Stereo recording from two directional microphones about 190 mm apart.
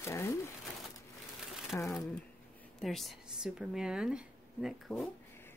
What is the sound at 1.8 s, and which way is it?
Speech, 15° left (ahead or behind).